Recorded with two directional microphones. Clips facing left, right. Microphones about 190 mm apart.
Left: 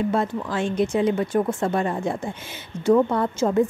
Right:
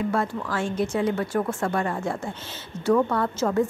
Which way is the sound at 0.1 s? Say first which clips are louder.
Left 2 dB; 20° left (ahead or behind).